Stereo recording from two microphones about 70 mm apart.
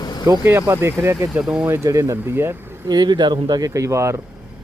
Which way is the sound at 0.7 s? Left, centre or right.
Right.